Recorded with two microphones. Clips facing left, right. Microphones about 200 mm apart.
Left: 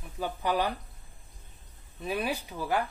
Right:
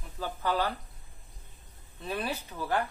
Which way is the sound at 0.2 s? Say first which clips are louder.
Left 1 dB; 15° left (ahead or behind).